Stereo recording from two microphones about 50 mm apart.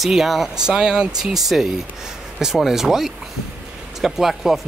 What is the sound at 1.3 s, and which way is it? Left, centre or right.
Speech, centre.